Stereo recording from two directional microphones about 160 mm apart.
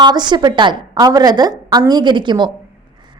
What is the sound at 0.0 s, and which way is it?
A woman's voice, 25° right (ahead or behind).